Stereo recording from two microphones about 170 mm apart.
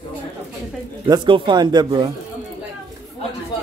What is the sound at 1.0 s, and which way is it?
Speech, 25° right (ahead or behind).